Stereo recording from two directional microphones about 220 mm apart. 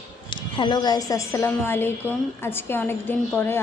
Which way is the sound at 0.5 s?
20° left (ahead or behind).